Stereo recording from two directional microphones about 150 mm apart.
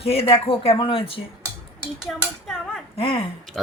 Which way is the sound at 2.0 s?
5° left (ahead or behind).